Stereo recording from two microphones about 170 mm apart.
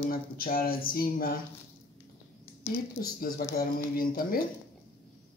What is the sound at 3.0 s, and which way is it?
Speech, 55° left (ahead or behind).